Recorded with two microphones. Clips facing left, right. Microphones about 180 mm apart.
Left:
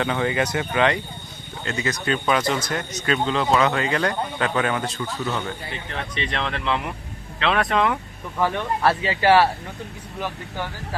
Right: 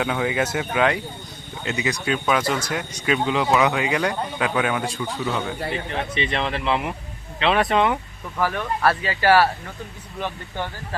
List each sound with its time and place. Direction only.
0.0 s speech: 5° right (ahead or behind)
1.6 s speech: 15° right (ahead or behind)
8.4 s speech: 25° left (ahead or behind)